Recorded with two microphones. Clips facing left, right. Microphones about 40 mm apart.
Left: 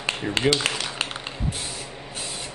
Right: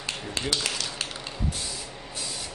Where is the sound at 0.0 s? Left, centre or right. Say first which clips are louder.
Left 8 dB; left.